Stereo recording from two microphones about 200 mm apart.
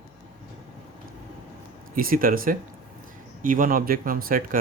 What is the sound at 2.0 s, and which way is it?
Speech, 45° right (ahead or behind).